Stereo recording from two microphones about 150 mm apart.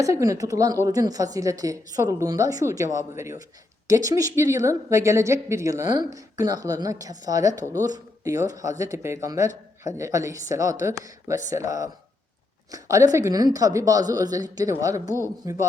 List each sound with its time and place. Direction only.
0.0 s a woman's voice: 20° right (ahead or behind)